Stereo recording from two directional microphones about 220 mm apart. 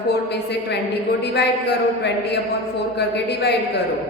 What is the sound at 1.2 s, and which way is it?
A woman's voice, 50° left (ahead or behind).